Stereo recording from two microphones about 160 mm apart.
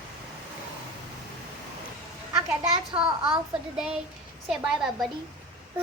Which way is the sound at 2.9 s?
35° right (ahead or behind).